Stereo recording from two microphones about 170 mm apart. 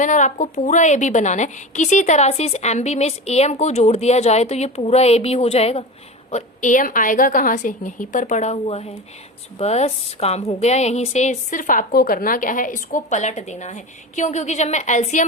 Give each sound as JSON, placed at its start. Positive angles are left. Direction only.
{"t": 0.0, "sound": "a woman's voice", "side_deg": 45}
{"t": 6.3, "sound": "a woman's voice", "side_deg": 45}